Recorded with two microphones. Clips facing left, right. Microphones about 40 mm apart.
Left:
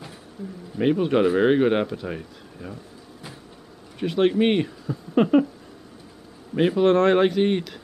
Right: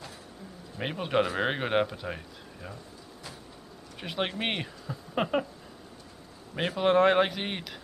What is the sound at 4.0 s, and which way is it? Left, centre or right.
Speech, centre.